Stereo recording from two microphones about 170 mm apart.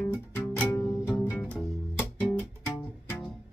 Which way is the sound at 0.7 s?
20° left (ahead or behind).